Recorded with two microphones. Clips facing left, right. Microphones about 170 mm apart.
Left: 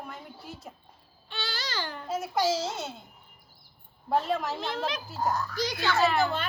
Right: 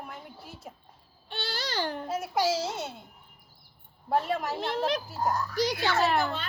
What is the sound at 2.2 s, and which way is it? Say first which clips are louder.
Speech: left 1 dB; 10° right (ahead or behind).